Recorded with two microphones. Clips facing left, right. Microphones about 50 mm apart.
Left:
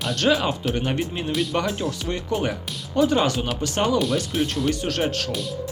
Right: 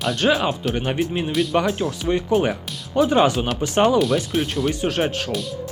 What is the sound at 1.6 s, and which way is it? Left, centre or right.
Speech, centre.